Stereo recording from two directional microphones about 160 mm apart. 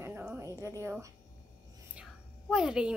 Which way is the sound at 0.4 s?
20° right (ahead or behind).